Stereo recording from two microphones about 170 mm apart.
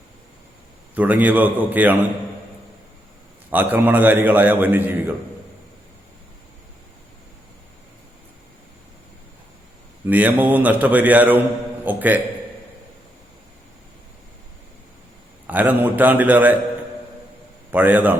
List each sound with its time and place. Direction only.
0.9 s a man's voice: 10° right (ahead or behind)
3.5 s a man's voice: 10° right (ahead or behind)
10.1 s a man's voice: 10° right (ahead or behind)
15.4 s a man's voice: 10° right (ahead or behind)
17.7 s a man's voice: 10° right (ahead or behind)